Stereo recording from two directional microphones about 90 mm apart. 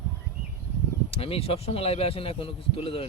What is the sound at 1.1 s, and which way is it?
Speech, 90° left.